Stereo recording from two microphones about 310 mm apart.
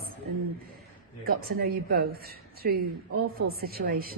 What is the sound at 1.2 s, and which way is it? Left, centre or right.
Speech, right.